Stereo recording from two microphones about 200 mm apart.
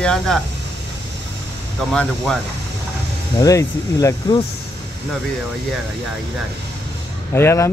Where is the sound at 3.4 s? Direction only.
15° left (ahead or behind).